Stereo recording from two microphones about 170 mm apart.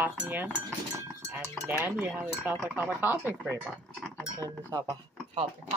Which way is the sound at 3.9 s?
10° left (ahead or behind).